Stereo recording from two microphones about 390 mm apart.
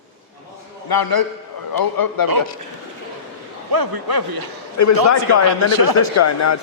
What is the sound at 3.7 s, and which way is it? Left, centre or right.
A man's voice, right.